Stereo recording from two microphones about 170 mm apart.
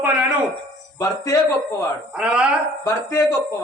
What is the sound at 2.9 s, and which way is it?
Speech, 20° left (ahead or behind).